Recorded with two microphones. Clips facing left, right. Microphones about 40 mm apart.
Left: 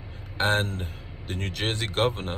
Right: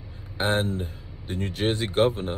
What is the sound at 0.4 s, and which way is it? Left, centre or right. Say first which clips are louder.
Speech: even; left.